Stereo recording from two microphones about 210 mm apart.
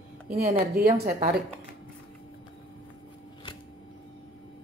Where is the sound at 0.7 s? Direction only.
45° right (ahead or behind).